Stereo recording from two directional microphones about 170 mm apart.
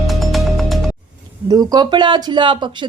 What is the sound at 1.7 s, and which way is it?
Speech, 25° right (ahead or behind).